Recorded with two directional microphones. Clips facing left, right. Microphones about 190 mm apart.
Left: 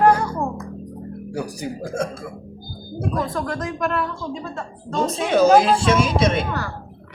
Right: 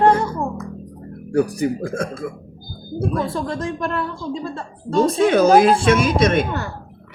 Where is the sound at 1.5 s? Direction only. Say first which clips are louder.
Right 4 dB; 55° right (ahead or behind).